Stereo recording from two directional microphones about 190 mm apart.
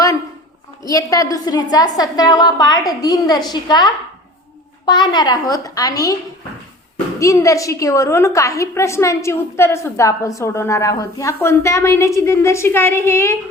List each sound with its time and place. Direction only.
0.9 s a woman's voice: 20° left (ahead or behind)
7.2 s a woman's voice: 15° left (ahead or behind)